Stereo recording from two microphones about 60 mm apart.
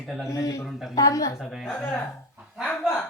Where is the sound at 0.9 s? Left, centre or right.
Left.